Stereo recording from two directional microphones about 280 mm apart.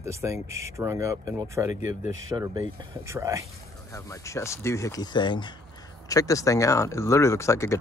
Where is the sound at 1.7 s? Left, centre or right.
Left.